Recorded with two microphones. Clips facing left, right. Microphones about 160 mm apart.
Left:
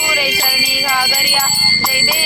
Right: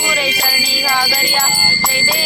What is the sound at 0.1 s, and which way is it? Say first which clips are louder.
Music: left 1 dB; 5° left (ahead or behind).